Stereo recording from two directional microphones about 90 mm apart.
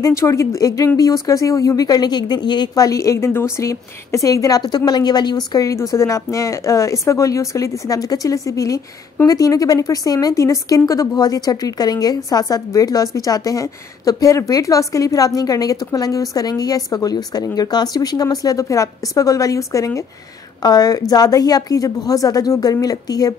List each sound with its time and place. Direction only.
0.0 s speech: 35° left (ahead or behind); by 5.7 s 50° left (ahead or behind)
5.7 s a woman's voice: 35° left (ahead or behind)